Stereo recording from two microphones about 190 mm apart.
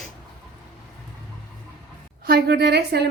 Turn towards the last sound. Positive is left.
turn(degrees=-60)  # may be behind; listen again after turning